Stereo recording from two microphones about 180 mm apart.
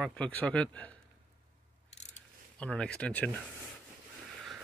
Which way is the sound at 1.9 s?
40° left (ahead or behind).